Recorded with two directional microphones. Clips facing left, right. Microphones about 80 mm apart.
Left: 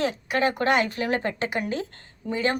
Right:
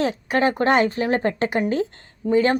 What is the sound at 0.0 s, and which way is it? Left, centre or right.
A woman's voice, right.